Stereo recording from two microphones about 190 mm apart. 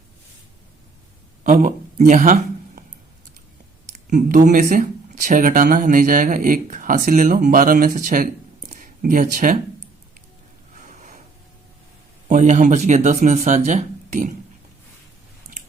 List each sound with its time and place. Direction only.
1.5 s a man's voice: 40° right (ahead or behind)
4.0 s speech: 45° right (ahead or behind)
10.8 s a sound: 40° right (ahead or behind)
12.3 s speech: 40° right (ahead or behind)